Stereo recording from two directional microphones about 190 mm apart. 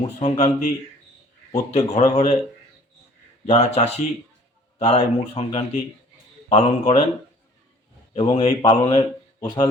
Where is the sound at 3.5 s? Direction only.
35° left (ahead or behind).